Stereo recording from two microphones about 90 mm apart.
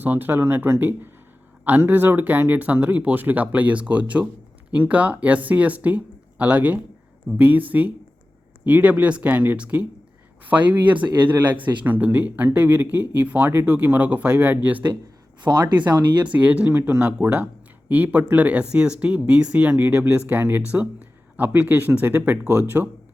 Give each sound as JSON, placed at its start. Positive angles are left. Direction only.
{"t": 0.0, "sound": "speech", "side_deg": -20}
{"t": 15.4, "sound": "speech", "side_deg": -55}
{"t": 16.2, "sound": "speech", "side_deg": -15}